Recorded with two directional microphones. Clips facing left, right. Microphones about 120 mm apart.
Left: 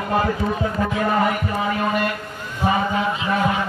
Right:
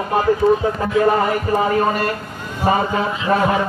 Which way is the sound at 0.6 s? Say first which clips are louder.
Right 5 dB; 35° right (ahead or behind).